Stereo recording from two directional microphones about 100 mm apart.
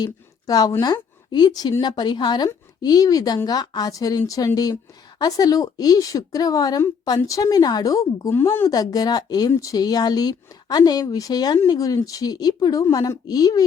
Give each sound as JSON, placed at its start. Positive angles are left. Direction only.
{"t": 0.0, "sound": "a woman's voice", "side_deg": 40}
{"t": 8.4, "sound": "speech", "side_deg": 20}
{"t": 8.7, "sound": "speech", "side_deg": 40}